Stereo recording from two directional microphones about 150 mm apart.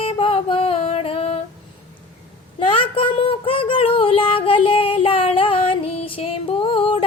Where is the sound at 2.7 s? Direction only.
35° left (ahead or behind).